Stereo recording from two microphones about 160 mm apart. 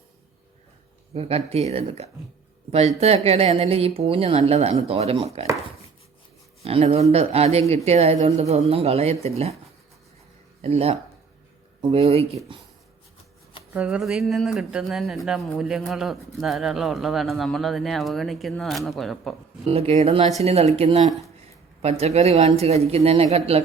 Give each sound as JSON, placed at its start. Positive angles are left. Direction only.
{"t": 1.1, "sound": "a woman's voice", "side_deg": -40}
{"t": 2.7, "sound": "a woman's voice", "side_deg": -40}
{"t": 6.6, "sound": "a woman's voice", "side_deg": -40}
{"t": 10.6, "sound": "a woman's voice", "side_deg": -40}
{"t": 13.7, "sound": "speech", "side_deg": -5}
{"t": 19.6, "sound": "a woman's voice", "side_deg": -40}